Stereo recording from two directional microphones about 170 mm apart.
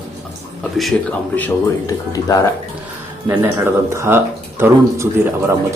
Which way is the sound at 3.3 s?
10° right (ahead or behind).